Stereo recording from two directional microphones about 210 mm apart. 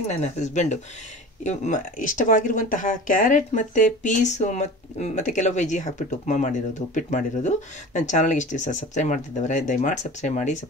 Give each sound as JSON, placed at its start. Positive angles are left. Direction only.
{"t": 0.1, "sound": "speech", "side_deg": 35}